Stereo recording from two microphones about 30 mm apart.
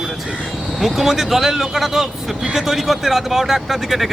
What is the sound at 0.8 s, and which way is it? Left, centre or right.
Speech, centre.